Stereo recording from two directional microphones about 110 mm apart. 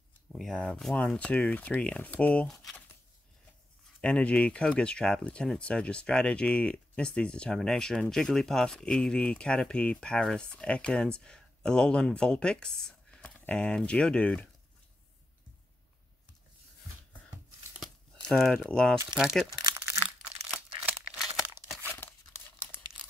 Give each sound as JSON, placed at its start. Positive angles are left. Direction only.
{"t": 0.3, "sound": "speech", "side_deg": 0}
{"t": 2.4, "sound": "speech", "side_deg": 0}
{"t": 4.0, "sound": "speech", "side_deg": 10}
{"t": 18.2, "sound": "speech", "side_deg": 5}
{"t": 19.1, "sound": "speech", "side_deg": -5}
{"t": 19.6, "sound": "crumpling", "side_deg": -20}
{"t": 20.9, "sound": "crumpling", "side_deg": -5}